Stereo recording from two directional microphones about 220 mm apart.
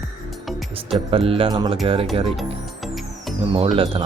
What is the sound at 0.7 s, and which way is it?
Speech, 25° right (ahead or behind).